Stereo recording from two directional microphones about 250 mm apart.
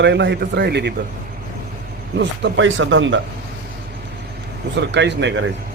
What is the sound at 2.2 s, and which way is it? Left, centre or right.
A man's voice, right.